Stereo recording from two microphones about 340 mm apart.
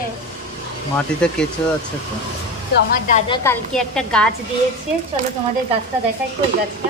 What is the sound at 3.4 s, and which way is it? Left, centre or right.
Speech, centre.